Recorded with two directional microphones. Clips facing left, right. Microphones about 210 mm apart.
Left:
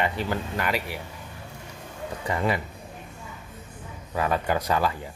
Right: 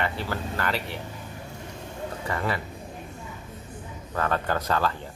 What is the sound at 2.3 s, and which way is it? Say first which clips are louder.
Speech: left 3 dB; 15° left (ahead or behind).